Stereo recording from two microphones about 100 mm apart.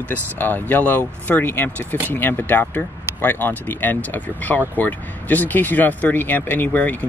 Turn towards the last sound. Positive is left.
turn(degrees=15)  # may be behind; listen again after turning